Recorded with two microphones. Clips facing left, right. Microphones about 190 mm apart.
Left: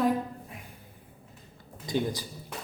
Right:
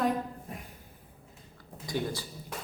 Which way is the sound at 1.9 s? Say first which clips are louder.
Left 4 dB; 20° left (ahead or behind).